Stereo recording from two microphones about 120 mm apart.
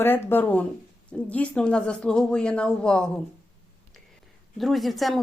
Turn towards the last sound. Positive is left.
turn(degrees=0)  # may be behind; listen again after turning